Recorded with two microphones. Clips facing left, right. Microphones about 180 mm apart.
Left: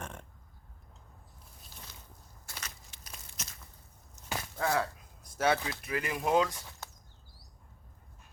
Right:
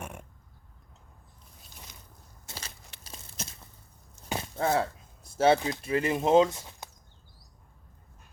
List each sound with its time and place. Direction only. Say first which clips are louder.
0.0 s burping: right 2 dB; 10° right (ahead or behind)
2.5 s crunch: right 3 dB; 30° right (ahead or behind)
4.3 s speech: right 4 dB; 25° right (ahead or behind)